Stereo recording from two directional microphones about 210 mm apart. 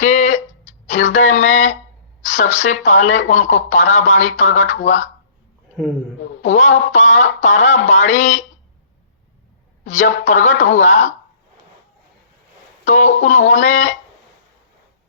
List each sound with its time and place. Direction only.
0.0 s a sound: 35° left (ahead or behind)
2.2 s speech: 35° left (ahead or behind)
6.4 s speech: 35° left (ahead or behind)
9.8 s speech: 35° left (ahead or behind)
12.8 s speech: 35° left (ahead or behind)